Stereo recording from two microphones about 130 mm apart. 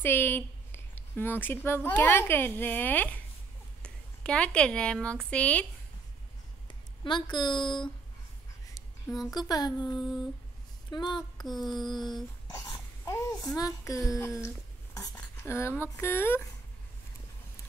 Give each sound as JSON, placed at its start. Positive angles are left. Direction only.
{"t": 0.0, "sound": "a woman's voice", "side_deg": 15}
{"t": 7.1, "sound": "speech", "side_deg": 35}
{"t": 9.3, "sound": "speech", "side_deg": 30}
{"t": 10.9, "sound": "speech", "side_deg": 35}
{"t": 11.4, "sound": "a sound", "side_deg": 0}
{"t": 11.8, "sound": "speech", "side_deg": 35}
{"t": 12.5, "sound": "babbling", "side_deg": 20}
{"t": 14.1, "sound": "speech", "side_deg": 25}